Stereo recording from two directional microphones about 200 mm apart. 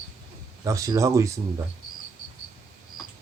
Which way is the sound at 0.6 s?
15° right (ahead or behind).